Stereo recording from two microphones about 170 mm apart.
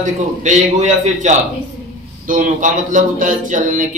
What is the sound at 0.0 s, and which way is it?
Speech, 45° right (ahead or behind).